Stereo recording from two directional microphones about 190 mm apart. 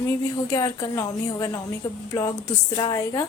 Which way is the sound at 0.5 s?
20° left (ahead or behind).